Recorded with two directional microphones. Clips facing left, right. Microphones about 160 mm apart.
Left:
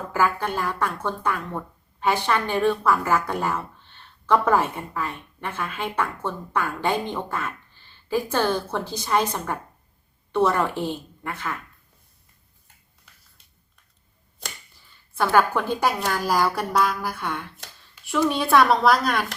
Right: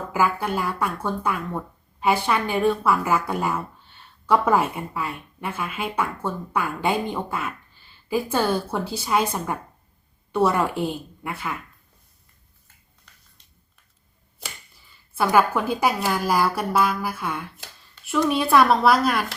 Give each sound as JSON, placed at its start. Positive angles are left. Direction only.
{"t": 0.1, "sound": "speech", "side_deg": -10}
{"t": 13.1, "sound": "a sound", "side_deg": 5}
{"t": 15.1, "sound": "a woman's voice", "side_deg": -5}